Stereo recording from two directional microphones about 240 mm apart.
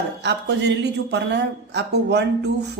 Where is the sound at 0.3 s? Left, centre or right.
Right.